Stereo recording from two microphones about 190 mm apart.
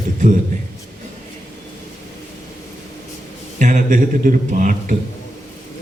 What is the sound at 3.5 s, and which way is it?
A man's voice, 40° right (ahead or behind).